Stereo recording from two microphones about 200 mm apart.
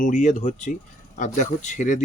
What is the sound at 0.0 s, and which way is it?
Speech, 40° left (ahead or behind).